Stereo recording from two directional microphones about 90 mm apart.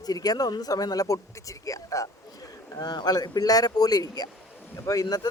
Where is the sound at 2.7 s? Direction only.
50° left (ahead or behind).